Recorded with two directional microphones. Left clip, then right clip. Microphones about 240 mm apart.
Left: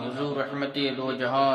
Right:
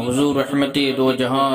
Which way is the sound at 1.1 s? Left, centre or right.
Right.